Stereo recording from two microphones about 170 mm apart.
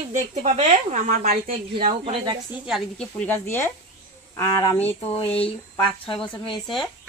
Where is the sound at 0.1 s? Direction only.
40° right (ahead or behind).